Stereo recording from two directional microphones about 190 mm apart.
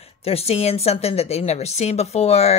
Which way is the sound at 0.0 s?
30° left (ahead or behind).